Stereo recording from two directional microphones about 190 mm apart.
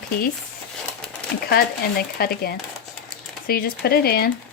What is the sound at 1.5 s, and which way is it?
Speech, 55° left (ahead or behind).